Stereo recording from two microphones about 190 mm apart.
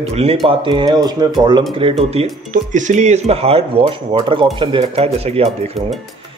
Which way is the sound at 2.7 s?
40° right (ahead or behind).